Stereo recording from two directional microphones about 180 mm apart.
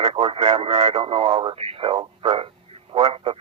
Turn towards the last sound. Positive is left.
turn(degrees=-30)  # may be behind; listen again after turning